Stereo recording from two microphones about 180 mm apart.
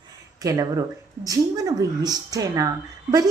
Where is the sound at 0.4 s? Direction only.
20° right (ahead or behind).